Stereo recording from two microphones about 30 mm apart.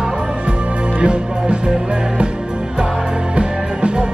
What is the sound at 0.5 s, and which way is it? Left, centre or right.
Music, right.